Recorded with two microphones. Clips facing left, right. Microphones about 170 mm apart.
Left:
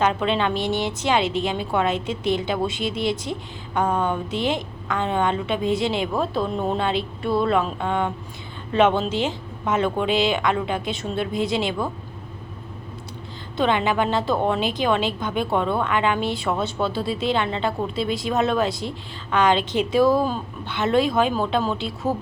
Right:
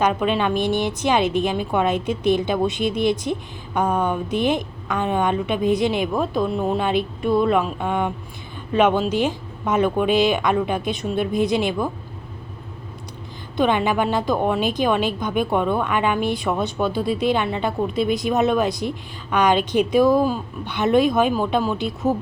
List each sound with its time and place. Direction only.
0.0 s a woman's voice: 15° right (ahead or behind)
13.6 s speech: 15° right (ahead or behind)